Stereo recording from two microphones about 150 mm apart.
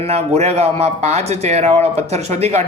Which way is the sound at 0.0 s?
45° right (ahead or behind).